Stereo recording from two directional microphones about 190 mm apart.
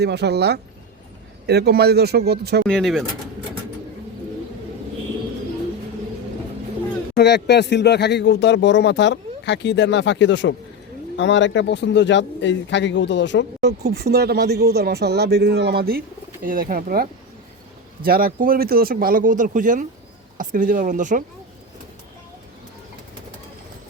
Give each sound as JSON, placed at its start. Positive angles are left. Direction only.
{"t": 0.0, "sound": "speech", "side_deg": -60}
{"t": 2.6, "sound": "speech", "side_deg": 5}
{"t": 7.2, "sound": "speech", "side_deg": 60}
{"t": 13.6, "sound": "speech", "side_deg": -60}